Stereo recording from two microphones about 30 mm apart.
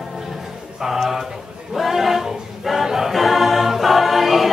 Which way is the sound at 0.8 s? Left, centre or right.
Centre.